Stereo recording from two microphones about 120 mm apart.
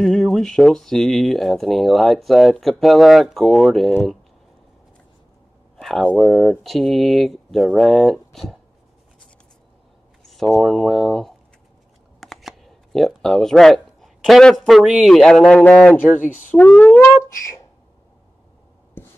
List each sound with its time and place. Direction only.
0.0 s speech: centre (ahead or behind)
5.8 s speech: 5° left (ahead or behind)
10.5 s speech: centre (ahead or behind)
19.0 s writing: 15° left (ahead or behind)